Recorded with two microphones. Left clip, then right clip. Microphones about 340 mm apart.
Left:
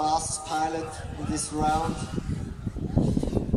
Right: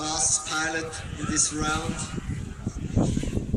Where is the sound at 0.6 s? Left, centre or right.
Centre.